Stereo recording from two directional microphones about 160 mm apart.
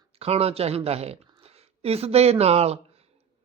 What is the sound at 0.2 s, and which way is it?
Speech, 40° right (ahead or behind).